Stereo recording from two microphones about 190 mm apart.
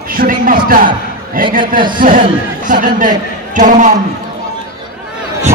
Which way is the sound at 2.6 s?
45° right (ahead or behind).